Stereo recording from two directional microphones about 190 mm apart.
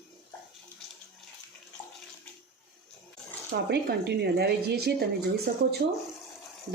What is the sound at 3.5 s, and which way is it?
Speech, 60° right (ahead or behind).